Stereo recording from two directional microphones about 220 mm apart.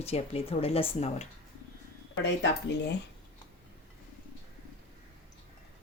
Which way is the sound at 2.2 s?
50° left (ahead or behind).